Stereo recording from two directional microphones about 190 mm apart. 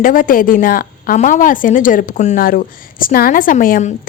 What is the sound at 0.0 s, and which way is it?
A woman's voice, 45° left (ahead or behind).